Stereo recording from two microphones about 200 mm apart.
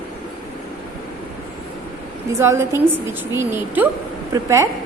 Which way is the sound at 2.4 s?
15° right (ahead or behind).